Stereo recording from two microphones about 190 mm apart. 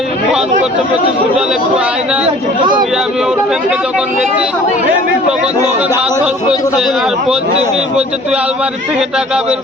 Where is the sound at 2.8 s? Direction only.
Centre (ahead or behind).